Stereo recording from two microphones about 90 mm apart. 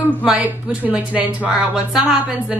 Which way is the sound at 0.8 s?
15° right (ahead or behind).